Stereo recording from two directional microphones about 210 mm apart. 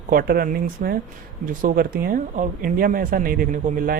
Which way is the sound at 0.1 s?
45° right (ahead or behind).